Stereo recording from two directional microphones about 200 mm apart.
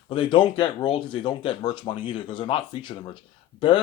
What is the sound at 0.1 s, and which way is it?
Speech, 25° left (ahead or behind).